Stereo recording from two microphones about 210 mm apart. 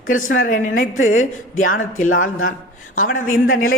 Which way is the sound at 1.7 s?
40° left (ahead or behind).